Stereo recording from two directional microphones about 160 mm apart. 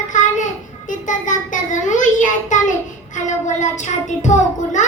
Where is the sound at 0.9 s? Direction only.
55° left (ahead or behind).